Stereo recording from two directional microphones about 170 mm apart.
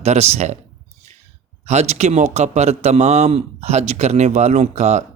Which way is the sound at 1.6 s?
40° right (ahead or behind).